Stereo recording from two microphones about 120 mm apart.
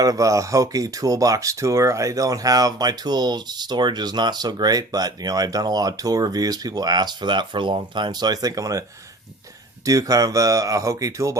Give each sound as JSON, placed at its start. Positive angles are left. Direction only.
{"t": 0.0, "sound": "speech", "side_deg": -30}
{"t": 9.8, "sound": "speech", "side_deg": -30}